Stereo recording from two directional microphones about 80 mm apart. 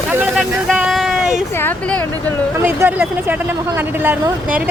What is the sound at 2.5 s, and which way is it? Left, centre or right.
Speech, right.